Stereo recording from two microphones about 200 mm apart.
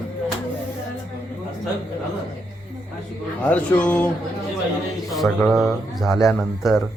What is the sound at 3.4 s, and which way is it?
Speech, 5° left (ahead or behind).